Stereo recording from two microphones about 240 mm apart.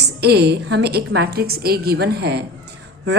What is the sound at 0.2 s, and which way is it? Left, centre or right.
A woman's voice, right.